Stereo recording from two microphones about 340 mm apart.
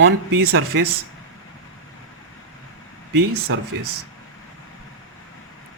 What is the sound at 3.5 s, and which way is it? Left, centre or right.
Speech, right.